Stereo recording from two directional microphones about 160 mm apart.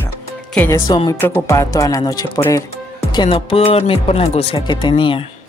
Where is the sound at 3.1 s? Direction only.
40° left (ahead or behind).